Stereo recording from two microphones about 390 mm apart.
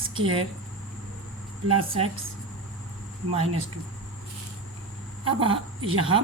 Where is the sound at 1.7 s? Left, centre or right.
Centre.